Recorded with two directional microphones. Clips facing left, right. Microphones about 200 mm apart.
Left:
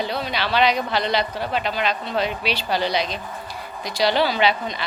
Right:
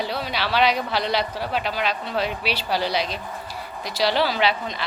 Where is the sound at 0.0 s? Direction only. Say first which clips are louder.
Left 1 dB; 5° right (ahead or behind).